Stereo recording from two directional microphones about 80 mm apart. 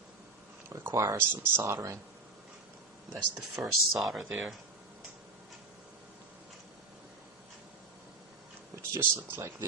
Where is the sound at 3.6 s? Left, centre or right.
Right.